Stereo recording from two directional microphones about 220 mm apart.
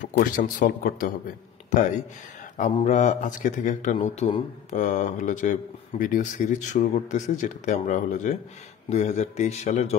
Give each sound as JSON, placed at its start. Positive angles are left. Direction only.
{"t": 0.0, "sound": "speech", "side_deg": 35}
{"t": 2.5, "sound": "speech", "side_deg": 35}